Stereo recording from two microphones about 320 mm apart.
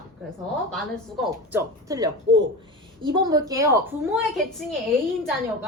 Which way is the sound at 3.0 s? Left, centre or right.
Centre.